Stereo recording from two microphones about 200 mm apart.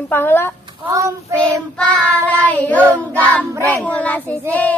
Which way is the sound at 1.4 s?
5° left (ahead or behind).